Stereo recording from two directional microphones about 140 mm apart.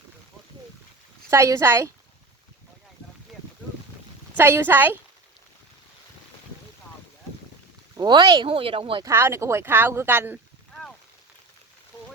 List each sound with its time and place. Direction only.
1.3 s a woman's voice: 20° right (ahead or behind)
4.4 s speech: 15° right (ahead or behind)
7.9 s speech: 30° right (ahead or behind)
9.0 s speech: 20° right (ahead or behind)
10.7 s a sound: 5° left (ahead or behind)